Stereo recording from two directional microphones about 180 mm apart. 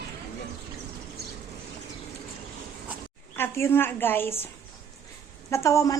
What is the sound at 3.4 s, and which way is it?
A woman's voice, 15° left (ahead or behind).